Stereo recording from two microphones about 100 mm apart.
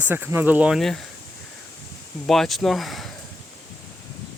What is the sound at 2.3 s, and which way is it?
Speech, centre (ahead or behind).